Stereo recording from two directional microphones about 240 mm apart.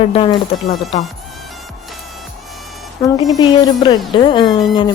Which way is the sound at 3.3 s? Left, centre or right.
Centre.